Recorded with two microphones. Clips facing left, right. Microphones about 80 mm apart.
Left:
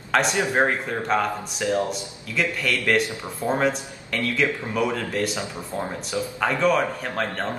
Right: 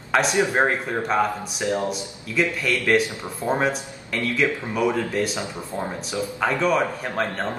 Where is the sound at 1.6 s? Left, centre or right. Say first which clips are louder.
Left 1 dB; right.